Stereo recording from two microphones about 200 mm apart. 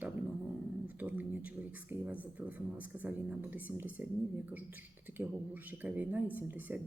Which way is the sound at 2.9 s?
10° right (ahead or behind).